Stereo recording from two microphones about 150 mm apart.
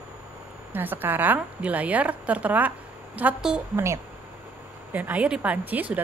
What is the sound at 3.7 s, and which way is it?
A woman's voice, 20° right (ahead or behind).